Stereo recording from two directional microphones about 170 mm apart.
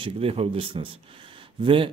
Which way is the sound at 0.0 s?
35° right (ahead or behind).